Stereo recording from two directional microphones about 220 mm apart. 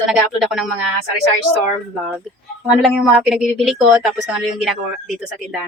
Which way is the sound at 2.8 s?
Centre (ahead or behind).